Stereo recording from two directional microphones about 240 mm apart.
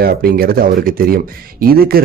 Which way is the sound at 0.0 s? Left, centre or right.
Right.